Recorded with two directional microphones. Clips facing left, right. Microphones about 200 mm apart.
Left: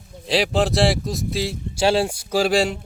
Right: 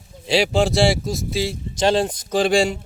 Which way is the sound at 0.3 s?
Centre (ahead or behind).